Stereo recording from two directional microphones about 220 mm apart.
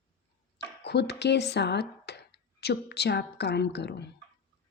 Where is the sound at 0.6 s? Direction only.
50° left (ahead or behind).